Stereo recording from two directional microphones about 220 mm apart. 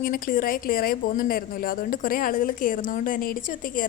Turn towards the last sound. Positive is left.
turn(degrees=40)  # may be behind; listen again after turning